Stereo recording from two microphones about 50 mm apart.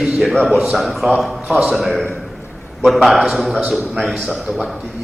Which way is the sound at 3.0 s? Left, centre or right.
Centre.